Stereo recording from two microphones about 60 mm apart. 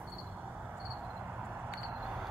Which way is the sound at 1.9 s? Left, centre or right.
Centre.